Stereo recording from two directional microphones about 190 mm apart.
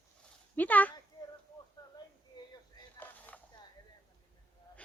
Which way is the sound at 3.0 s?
10° left (ahead or behind).